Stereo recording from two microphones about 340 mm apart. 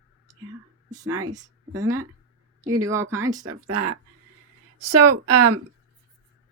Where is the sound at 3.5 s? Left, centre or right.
Right.